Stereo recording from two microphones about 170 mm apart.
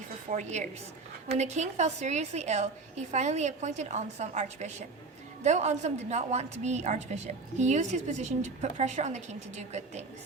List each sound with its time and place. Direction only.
0.3 s a woman's voice: 45° right (ahead or behind)